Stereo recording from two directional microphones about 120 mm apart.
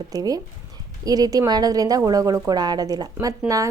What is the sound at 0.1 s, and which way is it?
A woman's voice, 30° right (ahead or behind).